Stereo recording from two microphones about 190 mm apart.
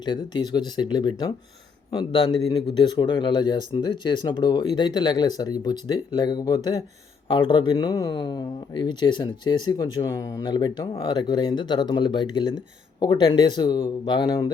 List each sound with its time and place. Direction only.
0.0 s speech: 25° left (ahead or behind)